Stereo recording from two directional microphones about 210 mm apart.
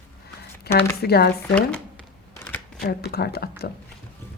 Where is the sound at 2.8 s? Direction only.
50° left (ahead or behind).